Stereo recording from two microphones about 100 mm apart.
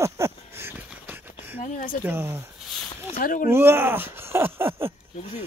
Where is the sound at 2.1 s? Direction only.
20° right (ahead or behind).